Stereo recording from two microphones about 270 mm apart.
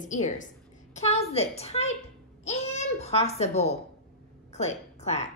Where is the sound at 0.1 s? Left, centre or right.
Left.